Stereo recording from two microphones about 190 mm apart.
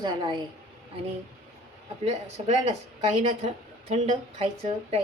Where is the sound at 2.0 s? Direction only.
35° right (ahead or behind).